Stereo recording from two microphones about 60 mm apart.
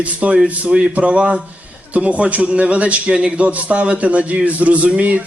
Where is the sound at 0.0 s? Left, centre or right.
Right.